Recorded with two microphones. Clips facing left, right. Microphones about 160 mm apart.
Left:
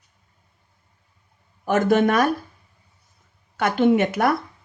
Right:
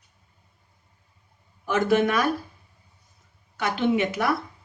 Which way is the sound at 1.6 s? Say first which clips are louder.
Left 3 dB; 45° left (ahead or behind).